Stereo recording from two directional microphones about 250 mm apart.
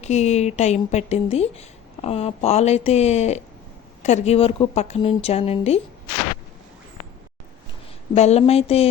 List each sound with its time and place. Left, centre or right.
0.0 s speech: left
8.1 s speech: left